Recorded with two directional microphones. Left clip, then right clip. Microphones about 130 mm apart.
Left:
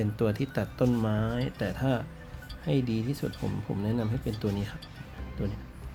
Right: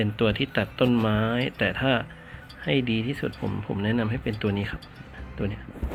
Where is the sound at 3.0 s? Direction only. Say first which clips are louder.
Right 4 dB; 15° right (ahead or behind).